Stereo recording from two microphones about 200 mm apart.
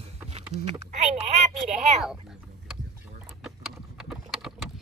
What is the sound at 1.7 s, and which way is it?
Speech, 5° right (ahead or behind).